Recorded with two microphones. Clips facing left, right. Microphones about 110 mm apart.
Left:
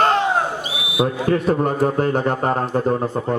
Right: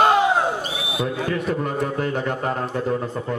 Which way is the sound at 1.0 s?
45° left (ahead or behind).